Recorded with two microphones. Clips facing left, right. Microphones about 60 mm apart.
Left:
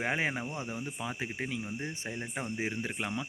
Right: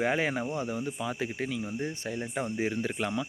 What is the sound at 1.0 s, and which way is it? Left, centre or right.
Speech, centre.